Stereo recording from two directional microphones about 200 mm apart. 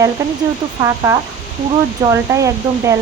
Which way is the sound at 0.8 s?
15° right (ahead or behind).